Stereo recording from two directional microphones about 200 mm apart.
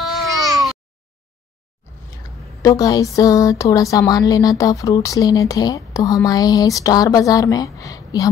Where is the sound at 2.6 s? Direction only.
15° left (ahead or behind).